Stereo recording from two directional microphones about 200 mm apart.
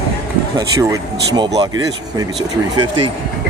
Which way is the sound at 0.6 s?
15° right (ahead or behind).